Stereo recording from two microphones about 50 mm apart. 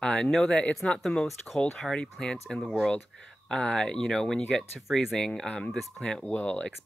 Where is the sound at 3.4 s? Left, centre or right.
Centre.